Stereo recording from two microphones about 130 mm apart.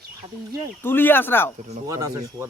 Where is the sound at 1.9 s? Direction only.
25° right (ahead or behind).